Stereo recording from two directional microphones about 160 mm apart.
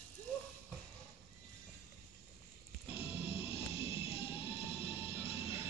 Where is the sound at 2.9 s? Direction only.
35° left (ahead or behind).